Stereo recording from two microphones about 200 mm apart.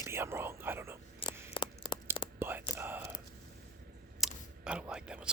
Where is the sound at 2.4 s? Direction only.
10° right (ahead or behind).